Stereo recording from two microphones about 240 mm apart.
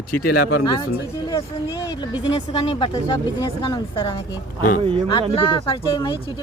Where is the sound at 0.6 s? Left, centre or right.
Centre.